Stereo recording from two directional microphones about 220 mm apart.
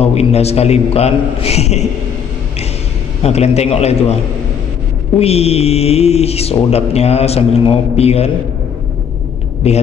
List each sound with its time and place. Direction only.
0.0 s speech: 30° left (ahead or behind)
3.2 s speech: 30° left (ahead or behind)
5.2 s speech: 30° left (ahead or behind)
9.6 s speech: 30° left (ahead or behind)